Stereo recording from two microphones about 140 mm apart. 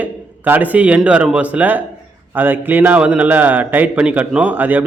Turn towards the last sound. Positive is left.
turn(degrees=-10)  # may be behind; listen again after turning